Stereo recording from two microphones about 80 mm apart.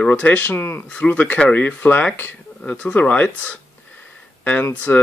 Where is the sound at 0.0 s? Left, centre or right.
Centre.